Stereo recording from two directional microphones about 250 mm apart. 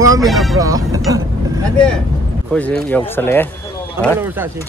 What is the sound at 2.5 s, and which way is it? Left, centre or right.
Speech, centre.